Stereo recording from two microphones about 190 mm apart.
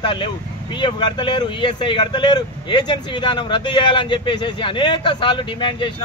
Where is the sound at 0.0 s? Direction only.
25° left (ahead or behind).